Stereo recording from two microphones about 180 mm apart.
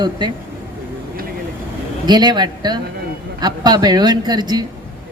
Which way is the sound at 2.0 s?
25° right (ahead or behind).